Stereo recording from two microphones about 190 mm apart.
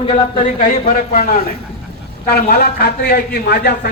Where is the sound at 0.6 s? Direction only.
45° left (ahead or behind).